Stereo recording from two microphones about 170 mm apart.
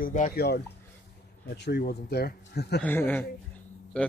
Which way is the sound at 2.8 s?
10° left (ahead or behind).